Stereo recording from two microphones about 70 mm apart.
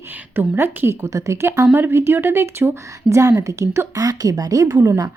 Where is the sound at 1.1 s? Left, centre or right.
Right.